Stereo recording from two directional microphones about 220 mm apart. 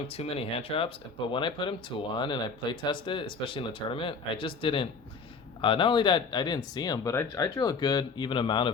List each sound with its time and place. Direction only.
0.2 s speech: 25° left (ahead or behind)